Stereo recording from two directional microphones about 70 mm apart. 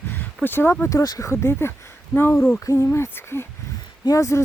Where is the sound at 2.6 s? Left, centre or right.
Left.